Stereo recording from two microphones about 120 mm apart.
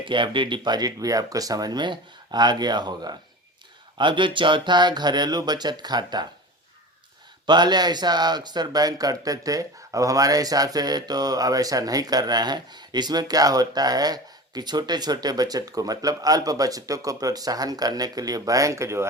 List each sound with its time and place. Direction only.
0.0 s speech: 45° right (ahead or behind)
7.4 s speech: 35° right (ahead or behind)